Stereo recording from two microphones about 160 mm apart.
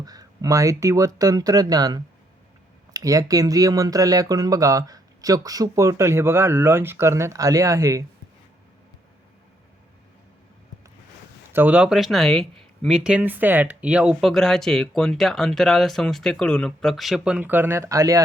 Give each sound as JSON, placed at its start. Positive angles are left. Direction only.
{"t": 0.0, "sound": "speech", "side_deg": -25}
{"t": 11.5, "sound": "speech", "side_deg": -10}